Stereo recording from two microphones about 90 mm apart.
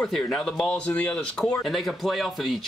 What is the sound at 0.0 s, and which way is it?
Speech, centre (ahead or behind).